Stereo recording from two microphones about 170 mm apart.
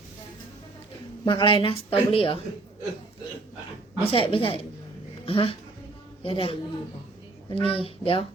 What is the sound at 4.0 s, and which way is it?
Speech, 35° left (ahead or behind).